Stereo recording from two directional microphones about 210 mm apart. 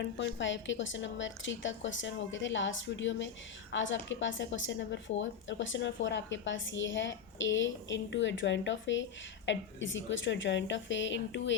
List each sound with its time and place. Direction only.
0.0 s speech: 60° left (ahead or behind)